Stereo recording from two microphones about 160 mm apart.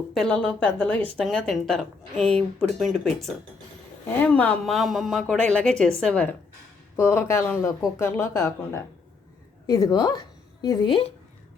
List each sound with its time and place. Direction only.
0.1 s speech: 5° left (ahead or behind)
4.2 s a woman's voice: 10° left (ahead or behind); by 11.1 s 30° left (ahead or behind)